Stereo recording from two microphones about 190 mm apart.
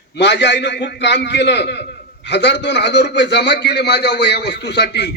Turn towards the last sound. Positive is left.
turn(degrees=60)  # may be behind; listen again after turning